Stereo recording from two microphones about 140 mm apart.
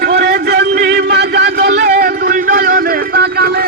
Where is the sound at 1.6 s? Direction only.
80° right.